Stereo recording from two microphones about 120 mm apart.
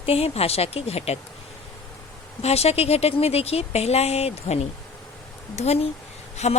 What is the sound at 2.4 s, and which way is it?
Speech, 60° left (ahead or behind).